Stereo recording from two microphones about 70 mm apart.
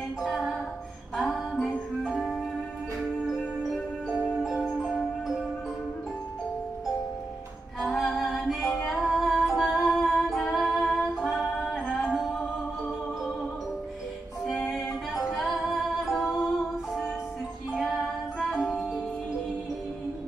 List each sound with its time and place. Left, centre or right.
0.2 s music: centre
4.4 s marimba: centre
7.8 s music: centre
14.4 s music: centre